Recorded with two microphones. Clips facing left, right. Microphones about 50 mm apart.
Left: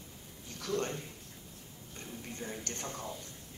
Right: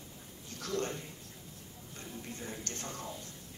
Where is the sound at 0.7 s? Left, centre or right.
Left.